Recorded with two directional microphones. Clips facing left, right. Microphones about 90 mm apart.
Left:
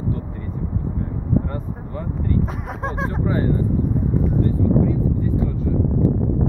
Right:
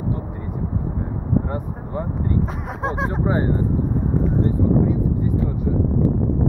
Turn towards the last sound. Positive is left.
turn(degrees=-20)  # may be behind; listen again after turning